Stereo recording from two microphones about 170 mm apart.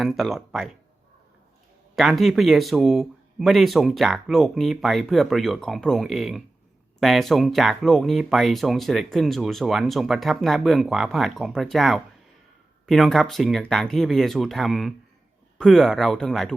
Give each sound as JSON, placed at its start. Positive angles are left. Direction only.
{"t": 0.0, "sound": "speech", "side_deg": 0}
{"t": 2.0, "sound": "speech", "side_deg": 0}